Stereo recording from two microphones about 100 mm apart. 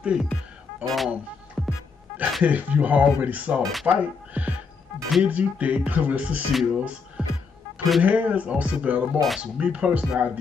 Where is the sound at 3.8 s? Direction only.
15° right (ahead or behind).